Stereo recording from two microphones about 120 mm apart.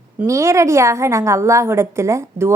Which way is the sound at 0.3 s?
25° right (ahead or behind).